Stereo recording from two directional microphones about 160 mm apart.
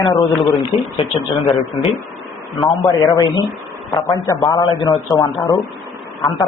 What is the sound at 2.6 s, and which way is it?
A man's voice, 25° left (ahead or behind).